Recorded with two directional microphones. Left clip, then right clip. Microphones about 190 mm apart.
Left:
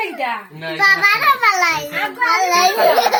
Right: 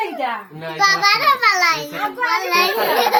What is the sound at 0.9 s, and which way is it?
Speech, 40° left (ahead or behind).